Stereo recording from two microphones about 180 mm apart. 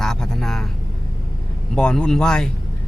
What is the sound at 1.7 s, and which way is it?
Speech, 5° left (ahead or behind).